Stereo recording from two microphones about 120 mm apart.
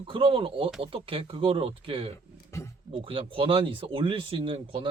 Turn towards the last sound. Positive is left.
turn(degrees=-50)  # may be behind; listen again after turning